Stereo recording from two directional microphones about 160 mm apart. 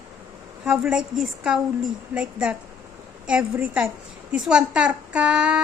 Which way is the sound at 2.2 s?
5° right (ahead or behind).